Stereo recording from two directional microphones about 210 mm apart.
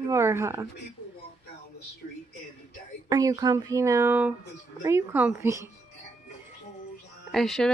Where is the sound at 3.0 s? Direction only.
15° right (ahead or behind).